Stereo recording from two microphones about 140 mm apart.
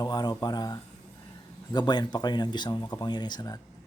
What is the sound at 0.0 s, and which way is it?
Speech, 30° left (ahead or behind).